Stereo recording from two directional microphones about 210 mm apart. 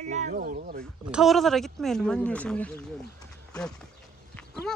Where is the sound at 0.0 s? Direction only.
35° right (ahead or behind).